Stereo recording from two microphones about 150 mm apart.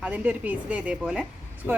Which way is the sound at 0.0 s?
10° right (ahead or behind).